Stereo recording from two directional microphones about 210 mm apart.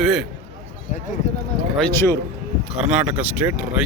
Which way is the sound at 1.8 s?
10° left (ahead or behind).